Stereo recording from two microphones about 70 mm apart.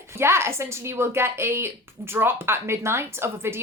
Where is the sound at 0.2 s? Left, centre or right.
Right.